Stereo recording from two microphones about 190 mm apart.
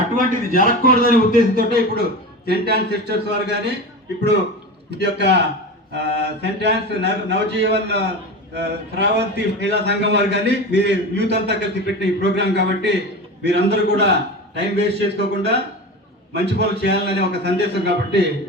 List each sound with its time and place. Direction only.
0.2 s a man's voice: 45° right (ahead or behind); by 3.8 s 60° right (ahead or behind)
4.9 s a man's voice: 65° right (ahead or behind)